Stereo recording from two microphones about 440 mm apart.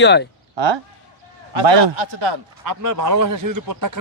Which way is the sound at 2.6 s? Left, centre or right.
Right.